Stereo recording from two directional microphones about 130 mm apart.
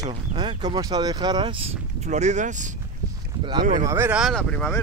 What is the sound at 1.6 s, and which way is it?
Speech, 60° right (ahead or behind).